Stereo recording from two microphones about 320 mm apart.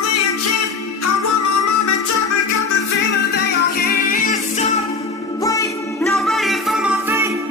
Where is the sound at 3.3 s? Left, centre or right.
Left; by 7.4 s centre.